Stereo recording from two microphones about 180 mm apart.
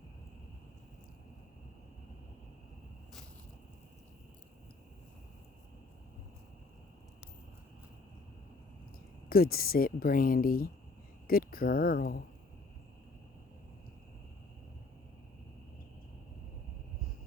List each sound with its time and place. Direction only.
9.3 s speech: 55° left (ahead or behind)